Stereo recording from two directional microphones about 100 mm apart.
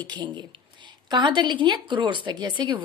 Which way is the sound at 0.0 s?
50° right (ahead or behind).